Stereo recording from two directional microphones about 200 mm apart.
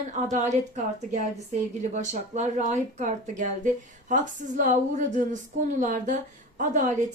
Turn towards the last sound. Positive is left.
turn(degrees=-40)  # may be behind; listen again after turning